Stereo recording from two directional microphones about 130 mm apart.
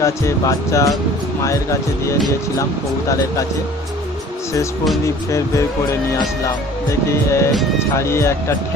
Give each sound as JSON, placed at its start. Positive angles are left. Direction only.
{"t": 0.0, "sound": "speech", "side_deg": 25}
{"t": 5.0, "sound": "speech", "side_deg": 25}
{"t": 7.1, "sound": "speech", "side_deg": 20}